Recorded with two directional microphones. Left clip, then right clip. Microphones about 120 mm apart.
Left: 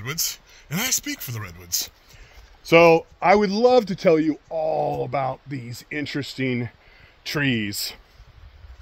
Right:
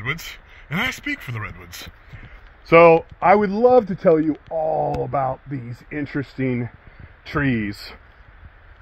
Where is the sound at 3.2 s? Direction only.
65° left (ahead or behind); by 6.7 s 50° left (ahead or behind).